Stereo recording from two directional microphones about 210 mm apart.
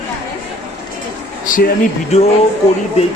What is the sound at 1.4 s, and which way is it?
Speech, 40° left (ahead or behind).